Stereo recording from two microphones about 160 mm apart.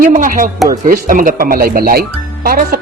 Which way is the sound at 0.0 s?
55° right (ahead or behind).